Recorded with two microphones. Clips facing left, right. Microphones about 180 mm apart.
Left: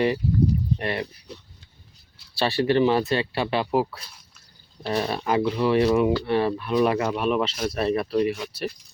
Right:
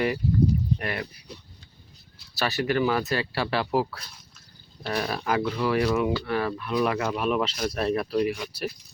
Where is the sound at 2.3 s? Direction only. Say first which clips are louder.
Left 4 dB; 30° left (ahead or behind).